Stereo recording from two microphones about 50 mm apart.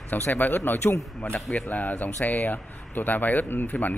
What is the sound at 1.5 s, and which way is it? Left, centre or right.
Speech, left.